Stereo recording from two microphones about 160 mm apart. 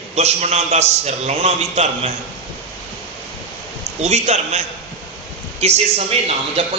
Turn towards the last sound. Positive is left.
turn(degrees=-40)  # may be behind; listen again after turning